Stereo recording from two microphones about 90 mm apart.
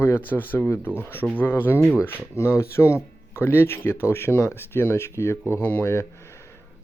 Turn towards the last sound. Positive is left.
turn(degrees=30)  # may be behind; listen again after turning